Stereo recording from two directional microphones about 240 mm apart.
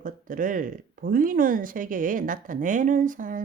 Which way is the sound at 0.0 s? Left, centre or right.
Right.